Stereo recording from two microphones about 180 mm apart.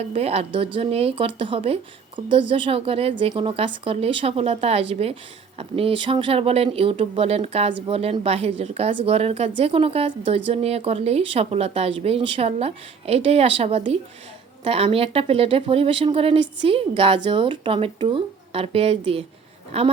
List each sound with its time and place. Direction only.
0.0 s a woman's voice: 35° right (ahead or behind)